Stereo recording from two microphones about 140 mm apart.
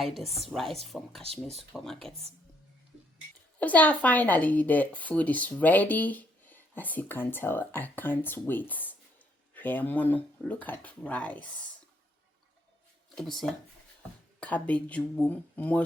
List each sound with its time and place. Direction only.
0.0 s a woman's voice: centre (ahead or behind)
1.2 s speech: 45° right (ahead or behind)
1.5 s a woman's voice: centre (ahead or behind)
3.6 s speech: 10° left (ahead or behind)
13.1 s a woman's voice: centre (ahead or behind)